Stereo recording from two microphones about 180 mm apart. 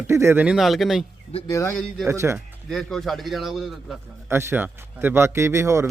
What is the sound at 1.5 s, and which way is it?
Speech, 15° left (ahead or behind).